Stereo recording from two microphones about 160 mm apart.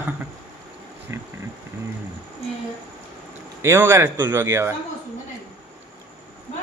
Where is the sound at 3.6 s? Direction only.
15° right (ahead or behind).